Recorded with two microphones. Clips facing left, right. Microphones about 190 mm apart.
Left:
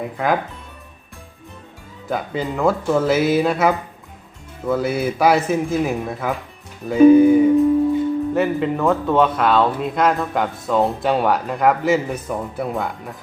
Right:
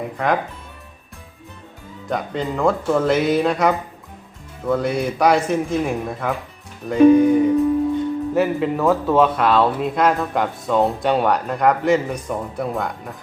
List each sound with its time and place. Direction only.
0.2 s speech: 5° left (ahead or behind)
2.0 s speech: 5° left (ahead or behind)